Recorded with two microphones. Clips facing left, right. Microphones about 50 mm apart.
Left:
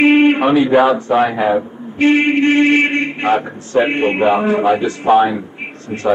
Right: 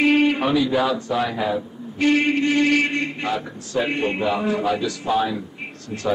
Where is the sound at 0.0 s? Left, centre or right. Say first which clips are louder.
Left 7 dB; left.